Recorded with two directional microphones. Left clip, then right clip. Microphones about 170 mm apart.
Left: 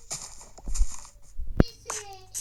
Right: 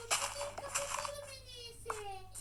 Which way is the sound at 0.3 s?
50° left (ahead or behind).